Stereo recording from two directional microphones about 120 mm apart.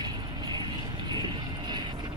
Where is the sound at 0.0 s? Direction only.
35° right (ahead or behind).